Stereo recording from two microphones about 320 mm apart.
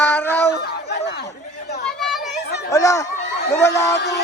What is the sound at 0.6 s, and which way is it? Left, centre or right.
Chatter, left.